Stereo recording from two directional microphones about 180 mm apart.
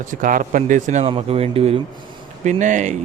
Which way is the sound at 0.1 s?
50° right (ahead or behind).